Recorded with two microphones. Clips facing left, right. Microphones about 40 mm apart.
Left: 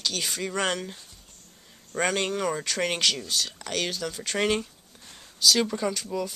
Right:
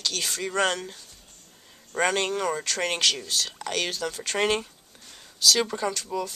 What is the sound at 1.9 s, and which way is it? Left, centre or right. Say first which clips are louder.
Speech: right 2 dB; centre.